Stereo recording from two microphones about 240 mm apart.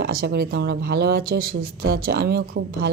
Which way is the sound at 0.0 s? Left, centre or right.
Right.